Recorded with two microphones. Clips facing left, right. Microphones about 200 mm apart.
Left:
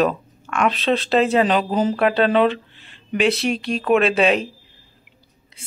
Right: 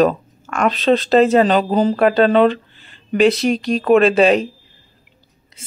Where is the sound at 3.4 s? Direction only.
40° right (ahead or behind).